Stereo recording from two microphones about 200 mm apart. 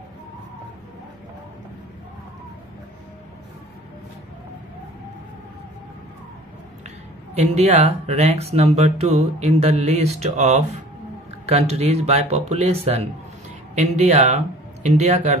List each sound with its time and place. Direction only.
7.5 s speech: 35° right (ahead or behind)